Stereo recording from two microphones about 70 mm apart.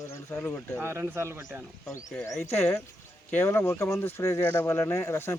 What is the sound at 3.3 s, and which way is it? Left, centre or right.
Speech, left.